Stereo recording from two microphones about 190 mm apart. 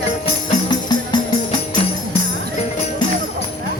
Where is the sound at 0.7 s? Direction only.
25° left (ahead or behind).